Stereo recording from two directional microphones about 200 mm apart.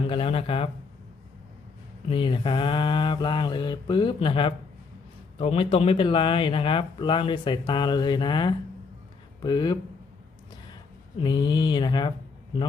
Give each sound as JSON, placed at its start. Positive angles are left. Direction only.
{"t": 0.0, "sound": "speech", "side_deg": 30}
{"t": 2.0, "sound": "speech", "side_deg": 25}
{"t": 11.2, "sound": "speech", "side_deg": 20}